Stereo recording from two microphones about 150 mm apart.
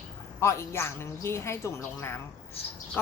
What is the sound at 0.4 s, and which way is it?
A woman's voice, 15° left (ahead or behind).